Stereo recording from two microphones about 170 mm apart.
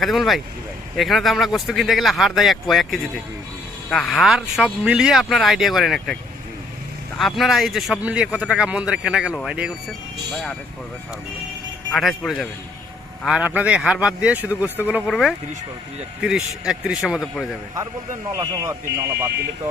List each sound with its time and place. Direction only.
0.0 s speech: centre (ahead or behind)
7.2 s speech: centre (ahead or behind)
11.9 s a man's voice: centre (ahead or behind)
18.3 s a man's voice: 20° right (ahead or behind)